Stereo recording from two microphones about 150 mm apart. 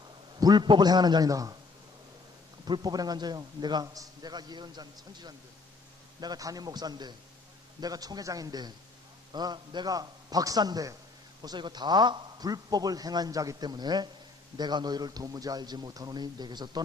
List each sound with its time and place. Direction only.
0.3 s a man's voice: 25° right (ahead or behind)
2.6 s a man's voice: 30° right (ahead or behind)